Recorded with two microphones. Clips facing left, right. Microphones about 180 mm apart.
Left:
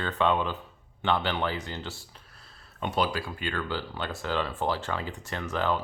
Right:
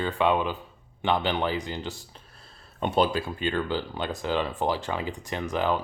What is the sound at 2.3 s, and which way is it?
Speech, 25° right (ahead or behind).